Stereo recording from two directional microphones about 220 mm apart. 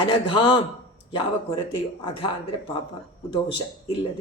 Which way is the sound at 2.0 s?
25° left (ahead or behind).